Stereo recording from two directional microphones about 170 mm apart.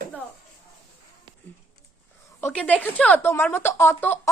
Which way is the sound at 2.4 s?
10° left (ahead or behind).